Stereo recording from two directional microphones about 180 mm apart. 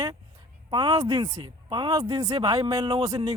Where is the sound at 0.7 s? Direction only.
25° right (ahead or behind).